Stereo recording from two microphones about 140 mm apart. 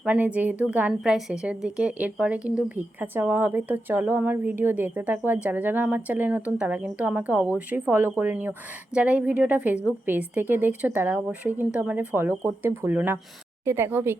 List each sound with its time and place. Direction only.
0.0 s a woman's voice: 10° right (ahead or behind)